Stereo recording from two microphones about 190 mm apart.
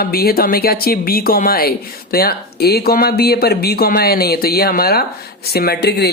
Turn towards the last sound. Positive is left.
turn(degrees=55)  # may be behind; listen again after turning